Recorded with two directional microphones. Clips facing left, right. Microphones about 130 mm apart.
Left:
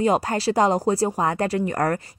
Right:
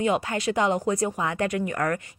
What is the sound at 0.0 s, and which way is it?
Speech, 35° left (ahead or behind).